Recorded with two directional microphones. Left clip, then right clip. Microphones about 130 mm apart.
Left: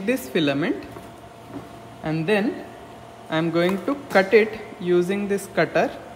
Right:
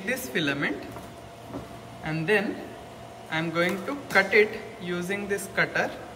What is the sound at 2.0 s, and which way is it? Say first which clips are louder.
A woman's voice: left 3 dB; 40° left (ahead or behind).